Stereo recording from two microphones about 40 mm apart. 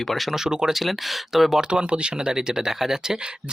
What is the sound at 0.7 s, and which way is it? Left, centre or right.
Speech, centre.